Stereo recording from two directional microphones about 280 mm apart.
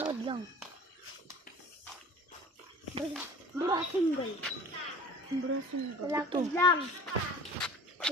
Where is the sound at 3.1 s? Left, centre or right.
Centre.